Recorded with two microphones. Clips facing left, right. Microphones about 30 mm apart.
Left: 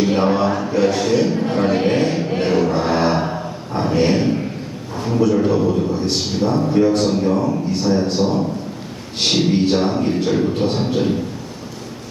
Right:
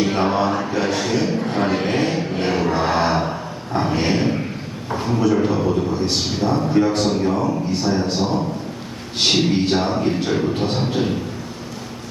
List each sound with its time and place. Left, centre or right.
0.0 s a man's voice: centre
5.5 s a man's voice: centre
6.7 s speech: centre
7.0 s a man's voice: centre